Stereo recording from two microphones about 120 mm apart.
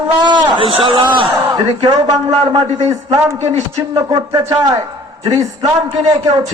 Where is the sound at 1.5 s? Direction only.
35° right (ahead or behind).